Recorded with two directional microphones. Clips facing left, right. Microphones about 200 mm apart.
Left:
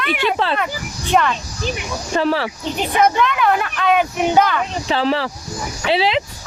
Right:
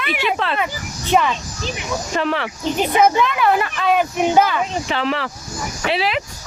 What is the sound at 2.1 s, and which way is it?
Speech, 35° left (ahead or behind).